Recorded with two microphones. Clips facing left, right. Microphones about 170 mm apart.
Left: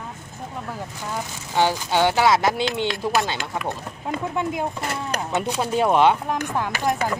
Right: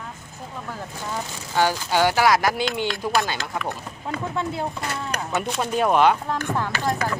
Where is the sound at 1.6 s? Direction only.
20° left (ahead or behind); by 6.2 s centre (ahead or behind).